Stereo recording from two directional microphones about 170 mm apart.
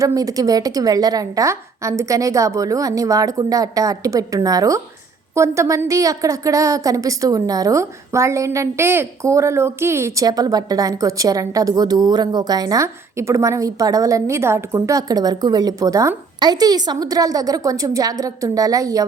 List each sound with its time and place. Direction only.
0.0 s a woman's voice: 20° right (ahead or behind)